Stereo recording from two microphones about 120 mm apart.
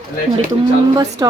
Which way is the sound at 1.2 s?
35° right (ahead or behind).